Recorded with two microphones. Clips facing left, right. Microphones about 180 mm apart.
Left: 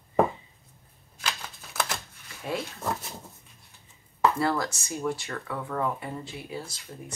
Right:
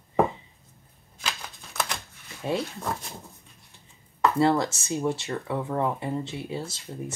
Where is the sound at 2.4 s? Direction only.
25° right (ahead or behind).